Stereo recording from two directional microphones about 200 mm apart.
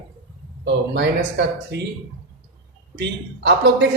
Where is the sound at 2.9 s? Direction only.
60° right (ahead or behind).